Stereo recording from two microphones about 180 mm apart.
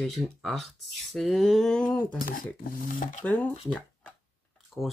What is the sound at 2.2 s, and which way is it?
Speech, 50° left (ahead or behind).